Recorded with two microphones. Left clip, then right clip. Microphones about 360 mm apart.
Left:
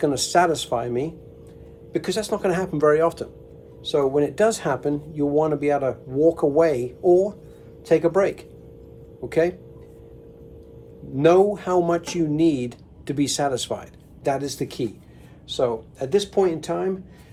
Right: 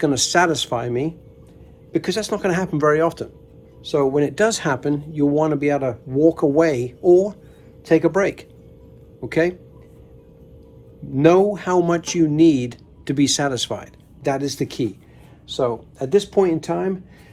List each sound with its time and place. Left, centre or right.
0.0 s speech: right
11.1 s speech: right